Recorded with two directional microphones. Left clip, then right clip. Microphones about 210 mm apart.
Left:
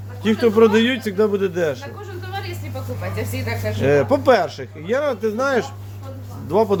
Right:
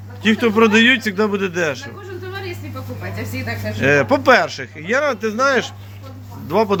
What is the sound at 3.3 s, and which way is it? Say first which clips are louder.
Speech: right 1 dB; 35° left (ahead or behind).